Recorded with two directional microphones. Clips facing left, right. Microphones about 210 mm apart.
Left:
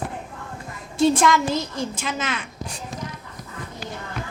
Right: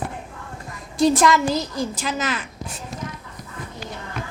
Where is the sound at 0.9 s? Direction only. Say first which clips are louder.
Right 1 dB; centre (ahead or behind).